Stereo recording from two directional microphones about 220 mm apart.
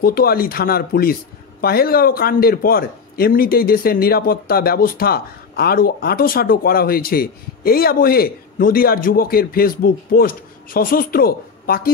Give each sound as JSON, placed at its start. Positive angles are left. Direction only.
{"t": 0.0, "sound": "a man's voice", "side_deg": 45}